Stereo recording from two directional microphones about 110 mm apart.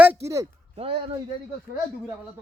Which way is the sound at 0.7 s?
60° right (ahead or behind).